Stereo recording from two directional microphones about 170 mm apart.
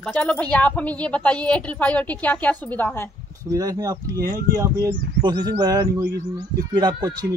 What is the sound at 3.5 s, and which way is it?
Speech, 20° right (ahead or behind).